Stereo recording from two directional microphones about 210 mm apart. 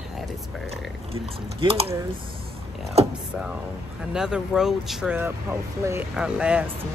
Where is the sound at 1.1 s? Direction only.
25° right (ahead or behind).